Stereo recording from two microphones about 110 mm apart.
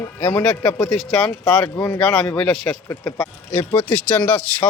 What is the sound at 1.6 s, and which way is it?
Speech, 25° left (ahead or behind).